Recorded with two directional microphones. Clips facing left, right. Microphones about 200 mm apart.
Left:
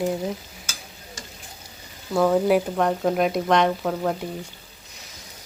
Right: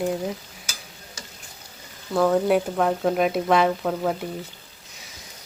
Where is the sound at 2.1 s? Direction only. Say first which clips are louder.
Left 1 dB; centre (ahead or behind).